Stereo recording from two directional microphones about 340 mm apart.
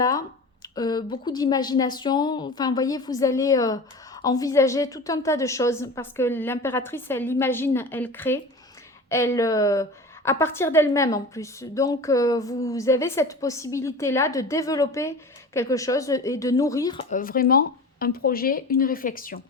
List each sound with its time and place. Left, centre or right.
0.8 s a woman's voice: centre